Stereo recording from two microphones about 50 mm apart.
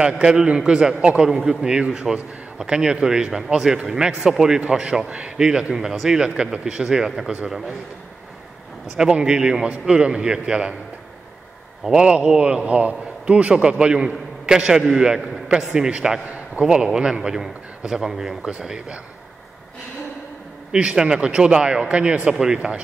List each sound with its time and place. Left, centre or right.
0.0 s a man's voice: centre
8.9 s a man's voice: centre
11.8 s a man's voice: centre
20.7 s a man's voice: centre